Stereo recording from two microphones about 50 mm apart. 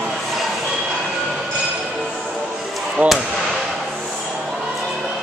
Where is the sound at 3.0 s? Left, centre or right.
Right.